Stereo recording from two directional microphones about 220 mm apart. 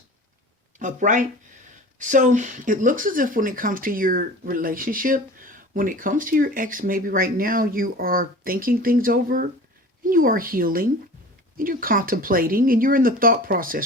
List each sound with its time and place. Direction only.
0.8 s speech: 35° right (ahead or behind)